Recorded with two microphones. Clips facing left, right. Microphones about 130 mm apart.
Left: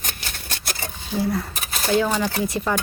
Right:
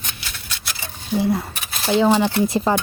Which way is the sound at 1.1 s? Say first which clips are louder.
Right 3 dB; 20° right (ahead or behind).